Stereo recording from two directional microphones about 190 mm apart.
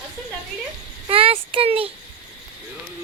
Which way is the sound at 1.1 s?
30° right (ahead or behind).